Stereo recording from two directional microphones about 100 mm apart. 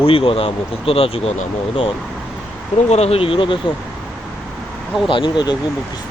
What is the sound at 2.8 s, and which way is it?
Speech, 90° left.